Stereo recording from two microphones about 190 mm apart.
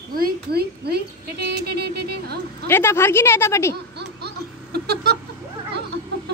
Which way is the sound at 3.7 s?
60° right (ahead or behind).